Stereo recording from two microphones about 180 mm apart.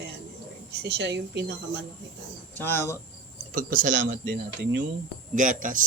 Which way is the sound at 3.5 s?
50° right (ahead or behind).